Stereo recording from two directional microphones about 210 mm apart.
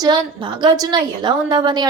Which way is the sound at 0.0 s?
20° right (ahead or behind).